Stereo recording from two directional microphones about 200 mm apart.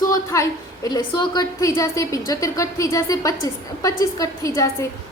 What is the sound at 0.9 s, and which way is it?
A woman's voice, 20° left (ahead or behind).